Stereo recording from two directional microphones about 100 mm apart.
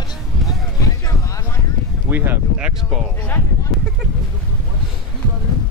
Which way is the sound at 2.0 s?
20° right (ahead or behind).